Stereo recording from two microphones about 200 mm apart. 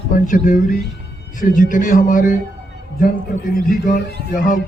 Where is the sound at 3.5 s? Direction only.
45° left (ahead or behind).